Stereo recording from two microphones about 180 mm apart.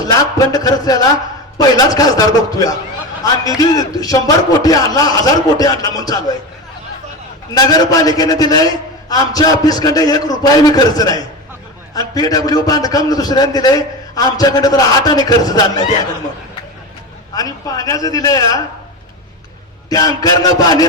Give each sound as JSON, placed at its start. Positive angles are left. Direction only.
{"t": 0.0, "sound": "a man's voice", "side_deg": 20}
{"t": 7.5, "sound": "a man's voice", "side_deg": 20}
{"t": 17.3, "sound": "a man's voice", "side_deg": 20}
{"t": 19.9, "sound": "a man's voice", "side_deg": 20}